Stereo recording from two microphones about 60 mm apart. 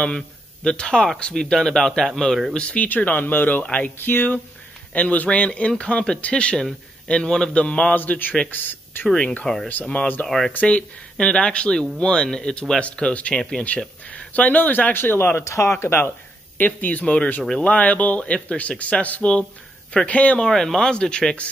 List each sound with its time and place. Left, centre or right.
0.7 s a man's voice: centre
2.5 s a man's voice: centre
9.4 s a man's voice: centre
10.5 s a man's voice: left
15.4 s speech: left
16.5 s speech: left
20.3 s a man's voice: centre